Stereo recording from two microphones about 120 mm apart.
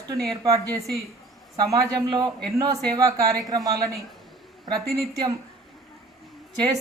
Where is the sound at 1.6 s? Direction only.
30° right (ahead or behind).